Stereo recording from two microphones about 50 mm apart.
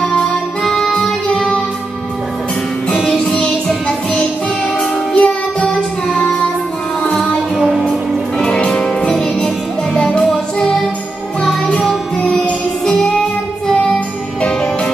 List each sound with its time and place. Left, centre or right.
0.7 s music: centre
2.9 s music: centre
5.1 s music: left
7.2 s music: centre
8.4 s music: centre
10.2 s music: centre
12.2 s music: left
13.9 s music: centre